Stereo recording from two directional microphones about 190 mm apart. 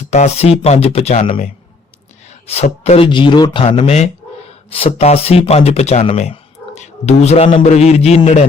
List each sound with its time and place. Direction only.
0.1 s speech: 35° left (ahead or behind)